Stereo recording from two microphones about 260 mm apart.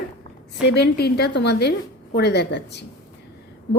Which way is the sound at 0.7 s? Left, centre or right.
Left.